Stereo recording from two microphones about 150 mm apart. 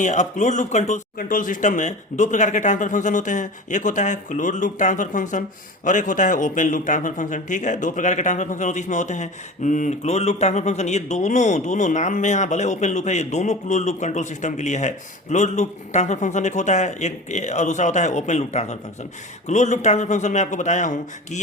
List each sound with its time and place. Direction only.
0.0 s a man's voice: 55° left (ahead or behind)